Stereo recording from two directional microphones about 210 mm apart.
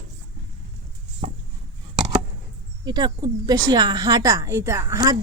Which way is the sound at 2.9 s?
20° right (ahead or behind).